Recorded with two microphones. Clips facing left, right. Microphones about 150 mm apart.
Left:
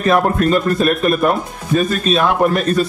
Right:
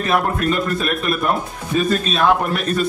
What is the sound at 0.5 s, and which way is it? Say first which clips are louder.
Speech: left 5 dB; 40° left (ahead or behind).